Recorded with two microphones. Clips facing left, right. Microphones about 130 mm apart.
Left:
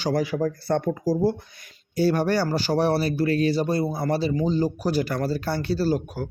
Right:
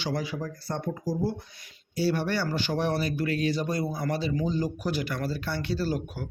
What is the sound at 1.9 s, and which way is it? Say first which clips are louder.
Speech: left 6 dB; 45° left (ahead or behind).